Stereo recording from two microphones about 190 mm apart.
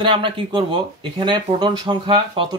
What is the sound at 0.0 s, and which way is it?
Speech, 25° right (ahead or behind).